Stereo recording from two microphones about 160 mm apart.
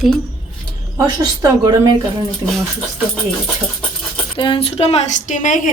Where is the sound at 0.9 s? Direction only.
25° right (ahead or behind).